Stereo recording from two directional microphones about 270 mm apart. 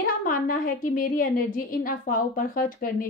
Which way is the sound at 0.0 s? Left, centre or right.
Left.